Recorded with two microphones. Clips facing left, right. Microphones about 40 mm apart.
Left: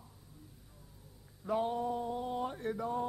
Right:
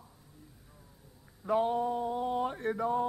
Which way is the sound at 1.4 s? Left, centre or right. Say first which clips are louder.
Right 4 dB; right.